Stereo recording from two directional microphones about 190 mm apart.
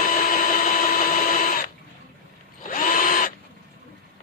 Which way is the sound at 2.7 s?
45° left (ahead or behind).